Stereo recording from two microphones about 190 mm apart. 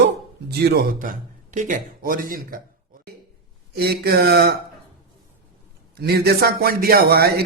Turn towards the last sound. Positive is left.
turn(degrees=-55)  # may be behind; listen again after turning